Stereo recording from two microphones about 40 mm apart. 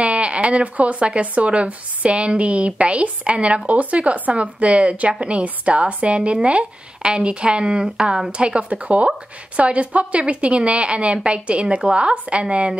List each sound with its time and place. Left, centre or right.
0.0 s a woman's voice: right
8.3 s speech: right